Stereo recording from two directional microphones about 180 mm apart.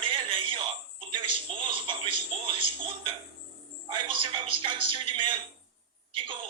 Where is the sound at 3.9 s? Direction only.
30° right (ahead or behind).